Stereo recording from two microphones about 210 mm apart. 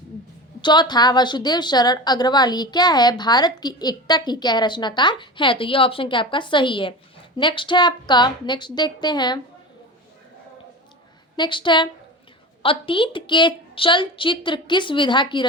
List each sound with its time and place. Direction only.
0.6 s a woman's voice: 20° left (ahead or behind)
11.3 s a woman's voice: 20° left (ahead or behind)